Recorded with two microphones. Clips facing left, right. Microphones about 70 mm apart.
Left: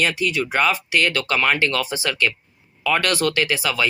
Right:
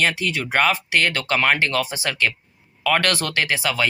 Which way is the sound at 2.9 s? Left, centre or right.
Right.